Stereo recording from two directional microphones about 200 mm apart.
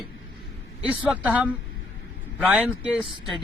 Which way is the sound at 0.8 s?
5° right (ahead or behind).